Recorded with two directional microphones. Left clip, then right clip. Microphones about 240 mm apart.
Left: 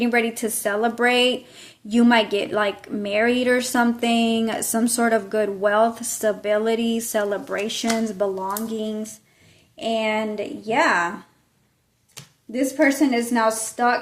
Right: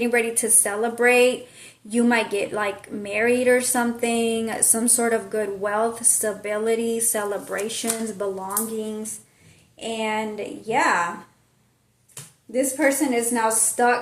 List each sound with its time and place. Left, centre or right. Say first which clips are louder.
0.0 s a woman's voice: even; left
12.5 s a woman's voice: left 1 dB; left